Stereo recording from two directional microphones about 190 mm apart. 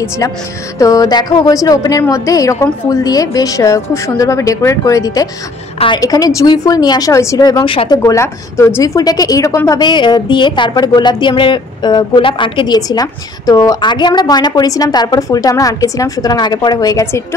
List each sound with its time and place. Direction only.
0.7 s a woman's voice: 20° left (ahead or behind)
8.0 s a woman's voice: 15° left (ahead or behind)